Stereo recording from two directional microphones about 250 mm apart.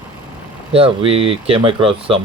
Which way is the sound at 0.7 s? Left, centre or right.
Right.